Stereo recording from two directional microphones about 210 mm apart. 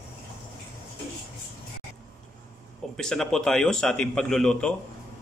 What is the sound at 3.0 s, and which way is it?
A man's voice, centre (ahead or behind).